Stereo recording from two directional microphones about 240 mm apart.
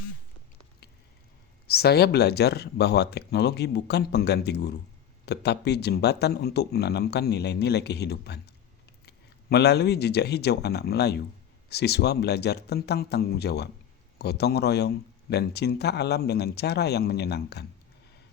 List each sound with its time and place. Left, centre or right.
1.6 s a man's voice: left